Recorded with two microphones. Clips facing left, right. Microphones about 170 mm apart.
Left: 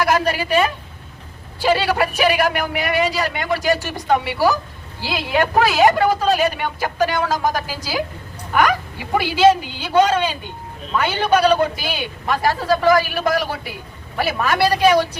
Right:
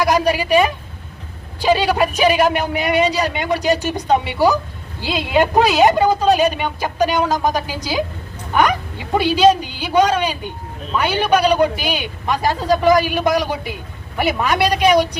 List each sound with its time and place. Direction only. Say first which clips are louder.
0.0 s a woman's voice: right 2 dB; 15° right (ahead or behind)